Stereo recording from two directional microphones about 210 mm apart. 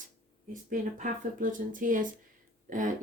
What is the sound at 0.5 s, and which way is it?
Speech, 40° right (ahead or behind).